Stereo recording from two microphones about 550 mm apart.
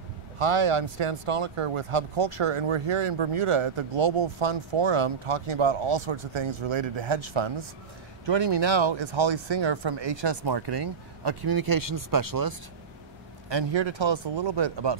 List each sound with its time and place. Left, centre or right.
0.4 s speech: right
13.5 s speech: right